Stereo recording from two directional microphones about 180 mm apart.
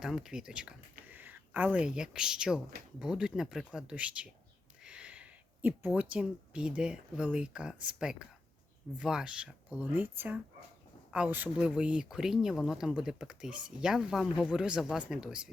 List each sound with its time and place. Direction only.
0.0 s speech: 5° right (ahead or behind)